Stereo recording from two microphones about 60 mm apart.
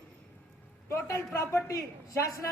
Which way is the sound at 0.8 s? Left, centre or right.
Left.